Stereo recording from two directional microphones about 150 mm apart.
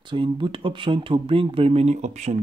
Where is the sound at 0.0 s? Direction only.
35° right (ahead or behind).